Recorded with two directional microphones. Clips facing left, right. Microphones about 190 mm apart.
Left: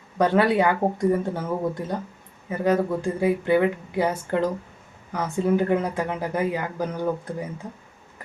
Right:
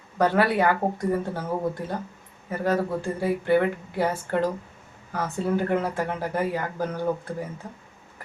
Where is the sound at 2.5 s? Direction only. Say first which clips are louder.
Left 3 dB; 15° left (ahead or behind).